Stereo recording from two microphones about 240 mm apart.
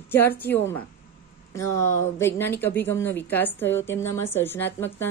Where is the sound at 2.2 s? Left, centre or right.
Centre.